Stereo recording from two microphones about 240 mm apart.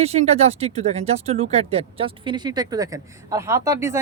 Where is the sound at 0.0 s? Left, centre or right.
Right.